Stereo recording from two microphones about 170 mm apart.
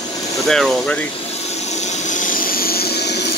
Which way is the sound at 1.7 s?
45° left (ahead or behind).